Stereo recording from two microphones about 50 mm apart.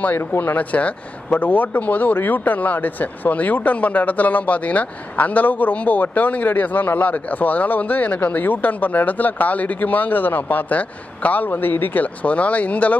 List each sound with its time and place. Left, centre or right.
0.4 s speech: left